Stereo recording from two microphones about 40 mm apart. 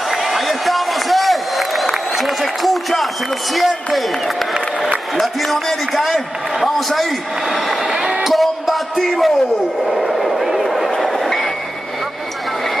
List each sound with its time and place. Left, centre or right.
0.1 s a sound: centre
3.5 s a man's voice: centre
5.2 s a man's voice: centre
7.8 s speech: right
8.2 s music: centre
9.8 s a sound: centre
11.0 s vehicle: centre